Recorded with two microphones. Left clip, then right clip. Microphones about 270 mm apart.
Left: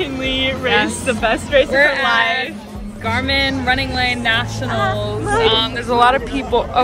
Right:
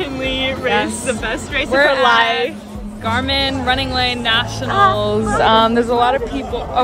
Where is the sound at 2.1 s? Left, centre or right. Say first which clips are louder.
Right 2 dB; right.